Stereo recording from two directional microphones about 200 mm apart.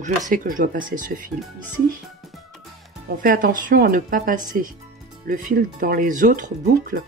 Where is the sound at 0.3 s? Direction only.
40° right (ahead or behind).